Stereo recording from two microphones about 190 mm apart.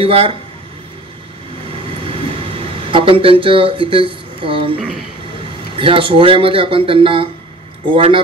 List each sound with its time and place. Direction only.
0.0 s speech: 30° right (ahead or behind)
2.0 s a sound: 30° right (ahead or behind)
5.8 s speech: 30° right (ahead or behind)